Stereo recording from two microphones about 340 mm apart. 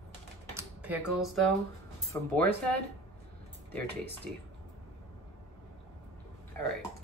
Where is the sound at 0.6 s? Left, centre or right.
Centre.